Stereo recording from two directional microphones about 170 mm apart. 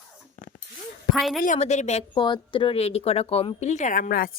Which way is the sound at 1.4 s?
45° left (ahead or behind).